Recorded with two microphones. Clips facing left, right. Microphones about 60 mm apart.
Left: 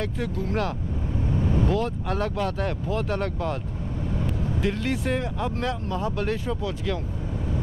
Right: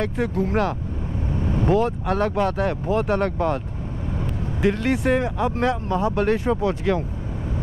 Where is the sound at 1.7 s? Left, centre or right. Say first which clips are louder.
Right 6 dB; right.